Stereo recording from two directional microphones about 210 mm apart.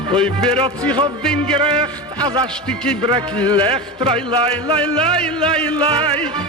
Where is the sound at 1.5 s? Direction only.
25° right (ahead or behind).